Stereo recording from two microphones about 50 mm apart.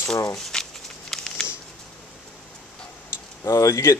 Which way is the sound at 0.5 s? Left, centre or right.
Centre.